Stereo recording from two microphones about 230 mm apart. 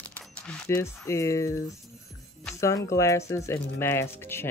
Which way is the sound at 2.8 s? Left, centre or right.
Centre.